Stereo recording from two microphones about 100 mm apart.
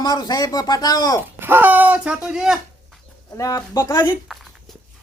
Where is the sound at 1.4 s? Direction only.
20° right (ahead or behind).